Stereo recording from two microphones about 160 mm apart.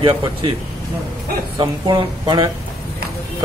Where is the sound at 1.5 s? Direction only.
25° right (ahead or behind).